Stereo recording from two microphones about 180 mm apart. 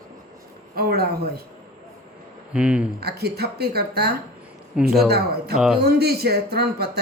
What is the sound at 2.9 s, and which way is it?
Speech, 60° right (ahead or behind).